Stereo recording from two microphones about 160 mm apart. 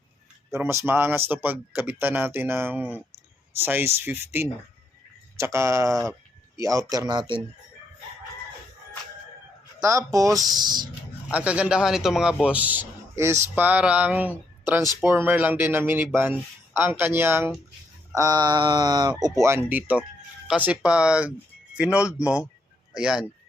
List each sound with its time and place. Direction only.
0.5 s speech: 15° right (ahead or behind)
9.8 s speech: 20° right (ahead or behind)
11.3 s speech: 10° right (ahead or behind)